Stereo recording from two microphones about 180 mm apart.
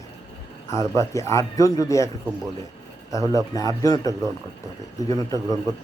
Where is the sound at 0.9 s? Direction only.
15° left (ahead or behind).